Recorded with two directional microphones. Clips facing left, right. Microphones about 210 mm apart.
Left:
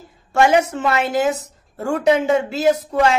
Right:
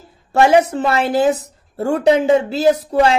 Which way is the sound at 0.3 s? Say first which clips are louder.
Right 3 dB; 35° right (ahead or behind).